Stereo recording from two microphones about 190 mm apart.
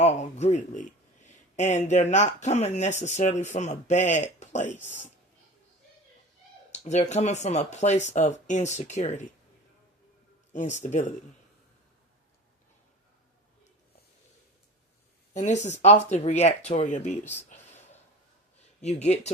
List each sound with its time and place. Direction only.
0.0 s speech: 35° left (ahead or behind)
6.7 s speech: 35° left (ahead or behind)
10.5 s speech: 40° left (ahead or behind)
15.3 s speech: 35° left (ahead or behind)
18.8 s speech: 35° left (ahead or behind)